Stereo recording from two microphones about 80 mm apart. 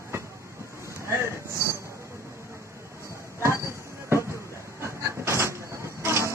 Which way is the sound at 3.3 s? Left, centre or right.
Right.